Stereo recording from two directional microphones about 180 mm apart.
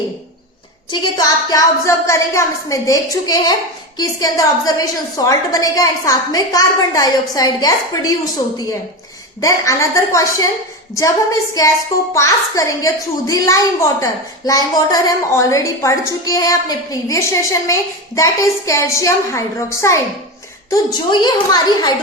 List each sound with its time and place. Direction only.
0.9 s a woman's voice: 20° left (ahead or behind)